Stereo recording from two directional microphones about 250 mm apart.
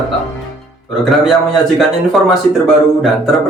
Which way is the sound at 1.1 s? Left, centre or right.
Centre.